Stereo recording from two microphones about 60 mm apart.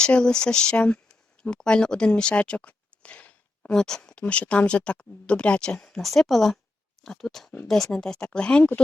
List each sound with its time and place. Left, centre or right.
0.0 s speech: centre
6.0 s speech: centre